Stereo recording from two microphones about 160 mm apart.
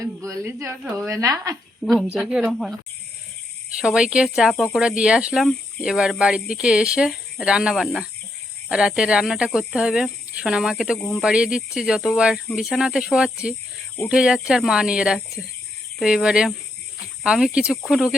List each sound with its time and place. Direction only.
0.0 s a woman's voice: 20° right (ahead or behind)
1.8 s speech: centre (ahead or behind)
3.8 s speech: 5° right (ahead or behind)